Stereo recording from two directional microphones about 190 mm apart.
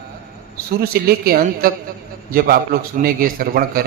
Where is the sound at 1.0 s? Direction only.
50° right (ahead or behind).